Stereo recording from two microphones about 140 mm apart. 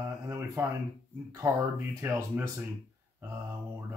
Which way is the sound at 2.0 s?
15° right (ahead or behind).